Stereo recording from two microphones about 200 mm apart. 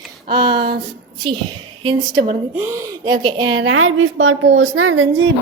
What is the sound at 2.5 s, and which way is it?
Speech, 15° right (ahead or behind).